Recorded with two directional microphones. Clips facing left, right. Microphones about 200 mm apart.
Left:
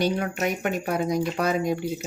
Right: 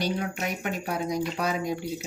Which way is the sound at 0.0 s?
55° left (ahead or behind).